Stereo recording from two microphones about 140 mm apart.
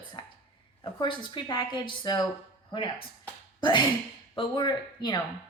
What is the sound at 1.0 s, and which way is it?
A woman's voice, 35° left (ahead or behind).